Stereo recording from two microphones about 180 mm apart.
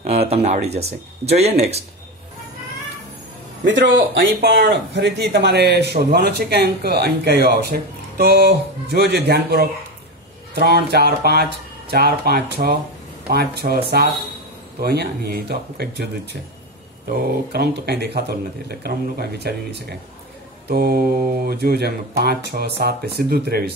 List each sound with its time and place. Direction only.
0.0 s speech: 35° right (ahead or behind)
3.6 s speech: 80° right
4.2 s speech: 65° right (ahead or behind)